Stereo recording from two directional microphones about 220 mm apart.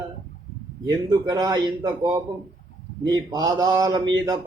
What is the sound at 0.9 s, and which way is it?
A man's voice, 15° right (ahead or behind).